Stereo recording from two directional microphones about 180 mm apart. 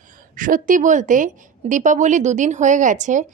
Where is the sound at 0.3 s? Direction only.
50° right (ahead or behind).